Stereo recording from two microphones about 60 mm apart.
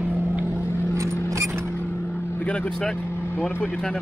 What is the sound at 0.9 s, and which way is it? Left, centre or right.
Vehicle, right.